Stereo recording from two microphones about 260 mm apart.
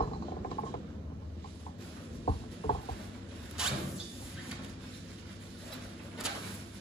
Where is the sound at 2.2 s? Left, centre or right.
Left.